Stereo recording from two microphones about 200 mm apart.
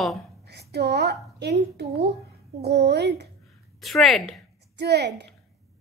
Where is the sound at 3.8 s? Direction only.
Centre (ahead or behind).